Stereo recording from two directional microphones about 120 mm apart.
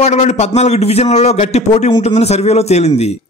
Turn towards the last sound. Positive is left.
turn(degrees=65)  # may be behind; listen again after turning